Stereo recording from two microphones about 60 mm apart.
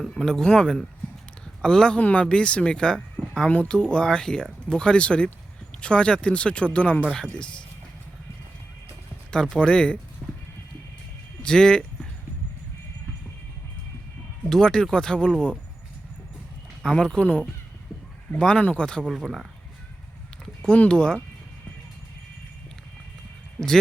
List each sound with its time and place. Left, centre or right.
0.1 s speech: centre
2.0 s speech: left
2.2 s speech: centre
9.3 s speech: centre
10.2 s clip-clop: centre
11.4 s speech: centre
14.5 s speech: centre
16.8 s speech: centre
18.9 s speech: centre
19.1 s speech: centre
20.7 s speech: centre